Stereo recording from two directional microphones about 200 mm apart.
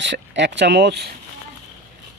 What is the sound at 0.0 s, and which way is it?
Speech, 60° right (ahead or behind).